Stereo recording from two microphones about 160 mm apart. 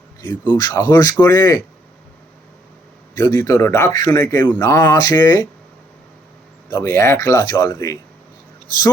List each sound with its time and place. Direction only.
0.2 s a man's voice: 25° left (ahead or behind)
3.2 s a man's voice: 20° left (ahead or behind)
6.7 s a man's voice: 20° left (ahead or behind)